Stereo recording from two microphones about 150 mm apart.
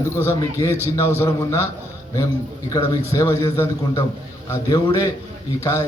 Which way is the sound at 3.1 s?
20° left (ahead or behind).